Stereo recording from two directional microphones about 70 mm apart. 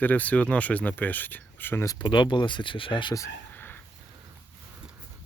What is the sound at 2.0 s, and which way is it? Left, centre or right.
Speech, left.